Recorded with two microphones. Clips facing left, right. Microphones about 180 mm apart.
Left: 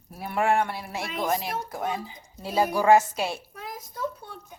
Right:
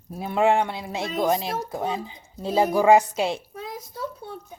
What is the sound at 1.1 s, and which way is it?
Speech, 40° right (ahead or behind).